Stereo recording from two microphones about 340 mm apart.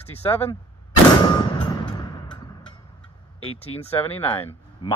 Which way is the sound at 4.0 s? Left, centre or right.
Centre.